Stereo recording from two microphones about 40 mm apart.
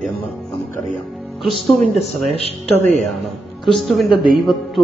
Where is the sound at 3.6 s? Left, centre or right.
Centre.